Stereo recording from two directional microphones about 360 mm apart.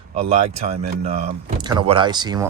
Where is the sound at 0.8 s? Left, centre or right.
Centre.